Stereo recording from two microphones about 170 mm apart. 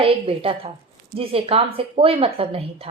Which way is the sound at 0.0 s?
35° right (ahead or behind).